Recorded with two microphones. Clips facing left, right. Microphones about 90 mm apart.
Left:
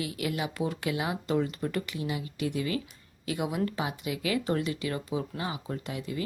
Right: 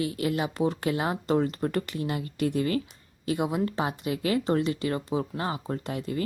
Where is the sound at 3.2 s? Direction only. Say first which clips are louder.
Right 3 dB; 30° right (ahead or behind).